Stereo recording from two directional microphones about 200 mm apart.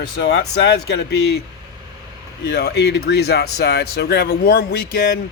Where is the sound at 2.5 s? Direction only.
55° left (ahead or behind).